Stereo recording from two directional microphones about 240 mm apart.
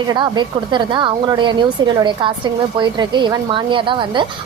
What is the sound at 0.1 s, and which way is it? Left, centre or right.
A woman's voice, centre.